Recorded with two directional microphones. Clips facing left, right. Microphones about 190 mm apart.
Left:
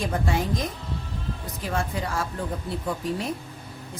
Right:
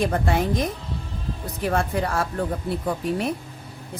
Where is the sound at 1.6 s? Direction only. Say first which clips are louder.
Right 6 dB; 60° right (ahead or behind).